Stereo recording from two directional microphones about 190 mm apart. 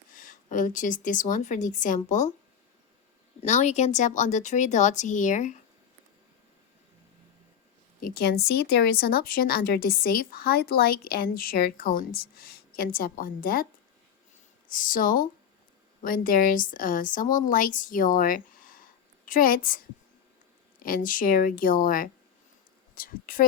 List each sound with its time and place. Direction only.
0.1 s a woman's voice: 45° left (ahead or behind)
3.4 s speech: 40° left (ahead or behind)
8.0 s a woman's voice: 55° left (ahead or behind)
11.3 s a woman's voice: 50° left (ahead or behind)
14.7 s a woman's voice: 45° left (ahead or behind)